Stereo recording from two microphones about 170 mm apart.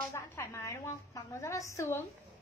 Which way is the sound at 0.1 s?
20° left (ahead or behind).